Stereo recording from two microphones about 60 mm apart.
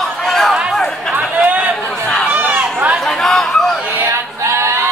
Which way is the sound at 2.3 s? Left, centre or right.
Right.